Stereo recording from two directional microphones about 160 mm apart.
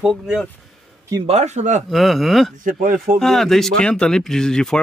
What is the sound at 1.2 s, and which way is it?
Speech, 45° right (ahead or behind).